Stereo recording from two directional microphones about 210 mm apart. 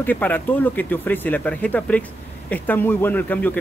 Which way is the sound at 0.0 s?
10° left (ahead or behind).